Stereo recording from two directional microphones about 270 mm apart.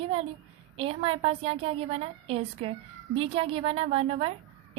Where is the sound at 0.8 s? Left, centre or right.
Centre.